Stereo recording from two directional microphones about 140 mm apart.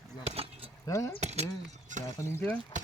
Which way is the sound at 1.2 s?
50° right (ahead or behind).